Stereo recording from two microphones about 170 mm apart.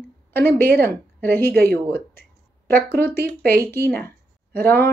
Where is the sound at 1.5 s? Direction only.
65° right (ahead or behind).